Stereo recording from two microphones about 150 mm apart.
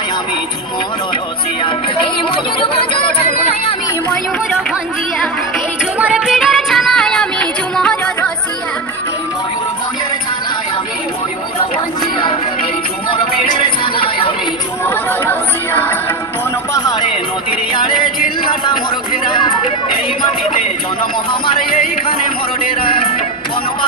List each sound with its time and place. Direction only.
2.6 s speech: 35° left (ahead or behind)
5.9 s music: 5° right (ahead or behind)
13.9 s chatter: 35° left (ahead or behind)
14.9 s chatter: 15° left (ahead or behind)
16.7 s music: 25° left (ahead or behind)
18.4 s music: 30° left (ahead or behind)